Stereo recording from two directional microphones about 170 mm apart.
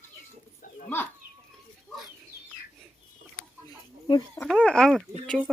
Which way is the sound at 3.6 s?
20° left (ahead or behind).